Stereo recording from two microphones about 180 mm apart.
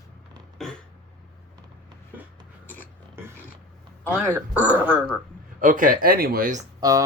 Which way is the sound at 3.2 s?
10° right (ahead or behind).